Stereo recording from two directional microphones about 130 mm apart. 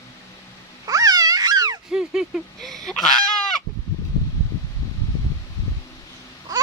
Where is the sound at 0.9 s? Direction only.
30° right (ahead or behind).